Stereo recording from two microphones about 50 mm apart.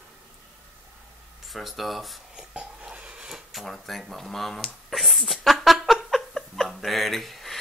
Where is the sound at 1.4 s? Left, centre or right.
Centre.